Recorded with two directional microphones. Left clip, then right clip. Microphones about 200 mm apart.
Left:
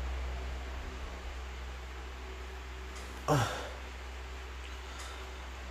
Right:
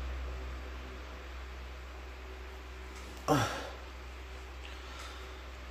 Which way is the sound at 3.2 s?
40° right (ahead or behind).